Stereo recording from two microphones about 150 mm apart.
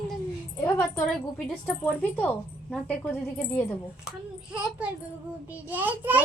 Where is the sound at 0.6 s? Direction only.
10° left (ahead or behind).